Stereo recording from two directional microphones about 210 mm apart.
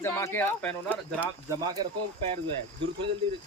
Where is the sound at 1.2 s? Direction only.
15° right (ahead or behind).